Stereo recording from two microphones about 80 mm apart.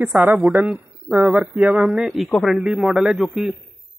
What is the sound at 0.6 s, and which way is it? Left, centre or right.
Speech, centre.